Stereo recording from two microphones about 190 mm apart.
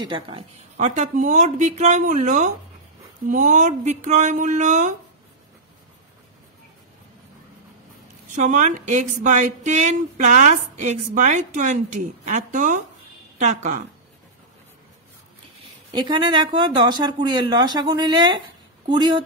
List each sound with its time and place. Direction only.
0.0 s a woman's voice: 25° right (ahead or behind)
8.4 s a woman's voice: 40° right (ahead or behind)
16.1 s speech: 20° right (ahead or behind)